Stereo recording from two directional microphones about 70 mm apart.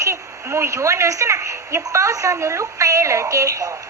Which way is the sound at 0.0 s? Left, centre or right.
Right.